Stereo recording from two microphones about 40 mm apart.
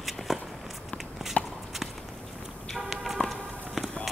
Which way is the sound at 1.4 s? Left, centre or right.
Left.